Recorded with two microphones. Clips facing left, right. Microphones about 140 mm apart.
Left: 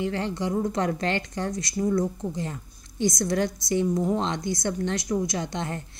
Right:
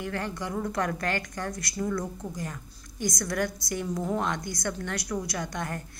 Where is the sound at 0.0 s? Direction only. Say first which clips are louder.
Left 5 dB; 20° left (ahead or behind).